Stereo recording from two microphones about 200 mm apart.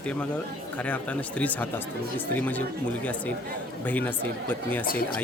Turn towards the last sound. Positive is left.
turn(degrees=45)  # may be behind; listen again after turning